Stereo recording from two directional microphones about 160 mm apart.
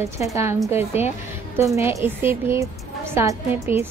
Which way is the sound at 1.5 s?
15° right (ahead or behind).